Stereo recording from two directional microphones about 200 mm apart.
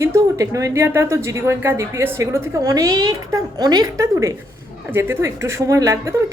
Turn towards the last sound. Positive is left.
turn(degrees=-15)  # may be behind; listen again after turning